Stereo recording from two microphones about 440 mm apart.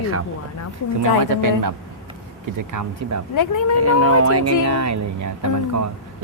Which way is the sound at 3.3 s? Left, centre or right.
Left.